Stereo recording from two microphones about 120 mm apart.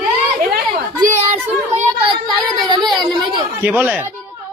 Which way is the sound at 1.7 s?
45° right (ahead or behind).